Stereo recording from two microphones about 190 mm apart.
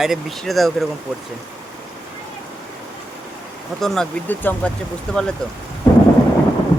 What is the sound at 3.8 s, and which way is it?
Speech, centre (ahead or behind).